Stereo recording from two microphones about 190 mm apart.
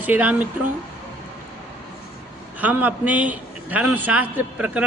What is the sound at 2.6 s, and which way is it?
A man's voice, 10° right (ahead or behind).